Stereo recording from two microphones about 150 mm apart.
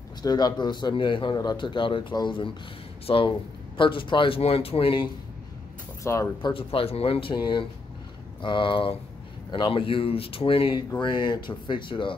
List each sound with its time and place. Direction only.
0.2 s a man's voice: 25° left (ahead or behind)
6.0 s speech: 20° left (ahead or behind)
6.5 s a man's voice: 40° left (ahead or behind)